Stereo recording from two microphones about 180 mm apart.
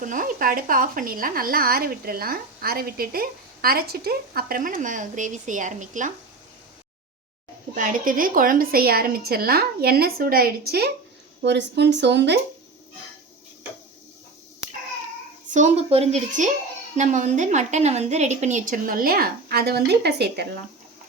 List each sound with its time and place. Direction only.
0.0 s speech: 50° right (ahead or behind)
7.8 s a woman's voice: 50° right (ahead or behind)
11.4 s speech: 70° right (ahead or behind)
15.5 s speech: 40° right (ahead or behind); by 20.5 s 65° right (ahead or behind)